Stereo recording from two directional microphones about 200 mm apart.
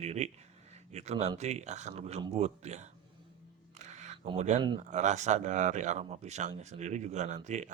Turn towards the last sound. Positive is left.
turn(degrees=-35)  # may be behind; listen again after turning